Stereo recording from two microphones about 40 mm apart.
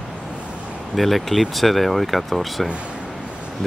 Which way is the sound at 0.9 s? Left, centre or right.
Centre.